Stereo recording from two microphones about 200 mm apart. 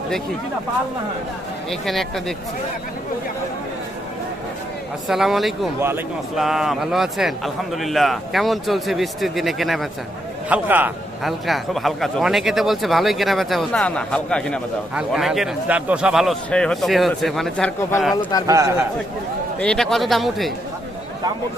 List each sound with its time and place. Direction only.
1.7 s a man's voice: centre (ahead or behind)
5.0 s a man's voice: centre (ahead or behind)
18.2 s speech: 20° left (ahead or behind)
18.4 s speech: 15° right (ahead or behind)
19.5 s a man's voice: 5° left (ahead or behind)